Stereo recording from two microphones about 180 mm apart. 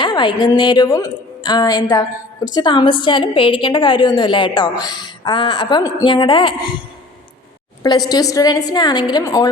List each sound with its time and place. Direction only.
0.0 s a sound: 25° left (ahead or behind)
0.4 s a woman's voice: 25° left (ahead or behind)
7.8 s a woman's voice: 20° left (ahead or behind)